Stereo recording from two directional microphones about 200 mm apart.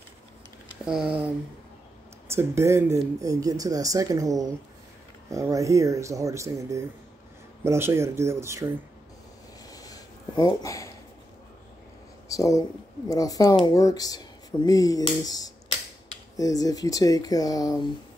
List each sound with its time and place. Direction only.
0.8 s speech: 5° right (ahead or behind)
9.7 s a sound: 20° left (ahead or behind)
12.3 s speech: 15° left (ahead or behind)